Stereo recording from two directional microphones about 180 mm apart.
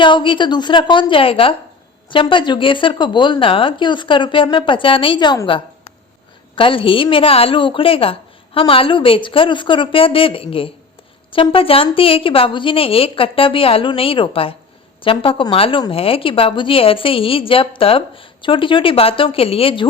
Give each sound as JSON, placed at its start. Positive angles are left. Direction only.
{"t": 0.0, "sound": "a woman's voice", "side_deg": 25}